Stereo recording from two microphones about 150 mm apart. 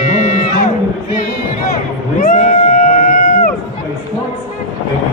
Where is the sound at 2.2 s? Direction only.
60° left (ahead or behind).